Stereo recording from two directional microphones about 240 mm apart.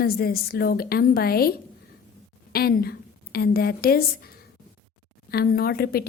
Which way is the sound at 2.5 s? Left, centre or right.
Left.